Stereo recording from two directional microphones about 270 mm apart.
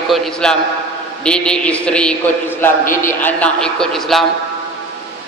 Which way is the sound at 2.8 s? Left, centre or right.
Left.